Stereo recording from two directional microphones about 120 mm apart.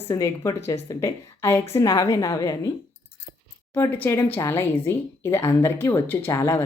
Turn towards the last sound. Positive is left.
turn(degrees=25)  # may be behind; listen again after turning